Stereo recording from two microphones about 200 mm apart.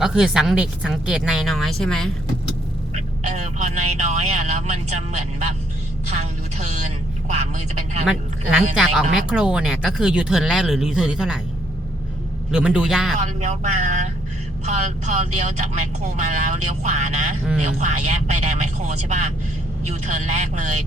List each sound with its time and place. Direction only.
0.0 s speech: 5° right (ahead or behind)
3.2 s speech: 35° right (ahead or behind)
6.1 s a sound: 35° right (ahead or behind)
8.0 s speech: 5° right (ahead or behind)
12.5 s speech: 5° right (ahead or behind)
13.2 s speech: 35° right (ahead or behind)